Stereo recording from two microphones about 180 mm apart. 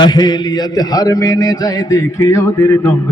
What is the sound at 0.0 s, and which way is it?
A man's voice, 20° left (ahead or behind).